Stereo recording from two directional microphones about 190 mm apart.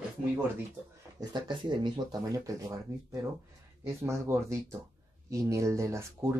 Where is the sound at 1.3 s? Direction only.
25° right (ahead or behind).